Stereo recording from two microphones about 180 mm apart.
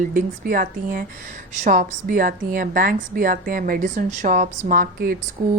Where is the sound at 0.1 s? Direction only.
50° right (ahead or behind).